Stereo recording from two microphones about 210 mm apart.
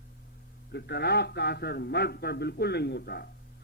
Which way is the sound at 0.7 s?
50° left (ahead or behind).